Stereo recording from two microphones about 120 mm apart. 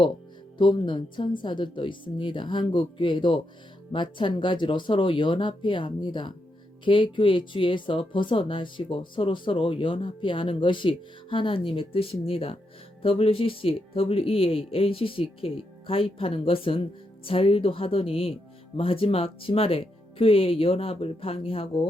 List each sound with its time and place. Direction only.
0.6 s speech: 40° left (ahead or behind)